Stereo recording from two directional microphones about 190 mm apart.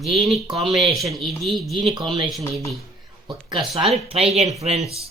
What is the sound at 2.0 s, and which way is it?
Speech, 25° right (ahead or behind).